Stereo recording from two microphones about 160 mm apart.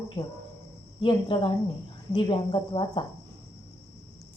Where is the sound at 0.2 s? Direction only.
25° left (ahead or behind).